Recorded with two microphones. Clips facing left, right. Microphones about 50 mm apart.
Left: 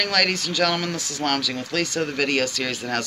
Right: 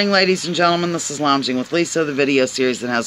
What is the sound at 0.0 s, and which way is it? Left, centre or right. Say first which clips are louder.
Speech: right 7 dB; centre.